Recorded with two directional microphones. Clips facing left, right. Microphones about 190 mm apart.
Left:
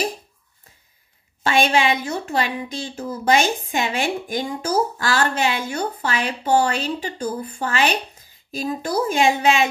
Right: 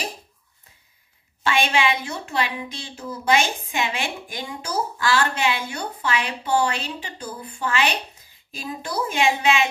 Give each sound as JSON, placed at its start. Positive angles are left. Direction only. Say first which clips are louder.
{"t": 1.4, "sound": "a woman's voice", "louder": "left 3 dB", "side_deg": 40}